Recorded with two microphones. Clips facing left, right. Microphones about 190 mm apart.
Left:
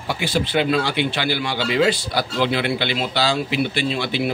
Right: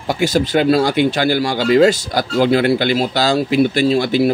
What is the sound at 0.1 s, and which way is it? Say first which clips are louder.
Speech: right 6 dB; 40° right (ahead or behind).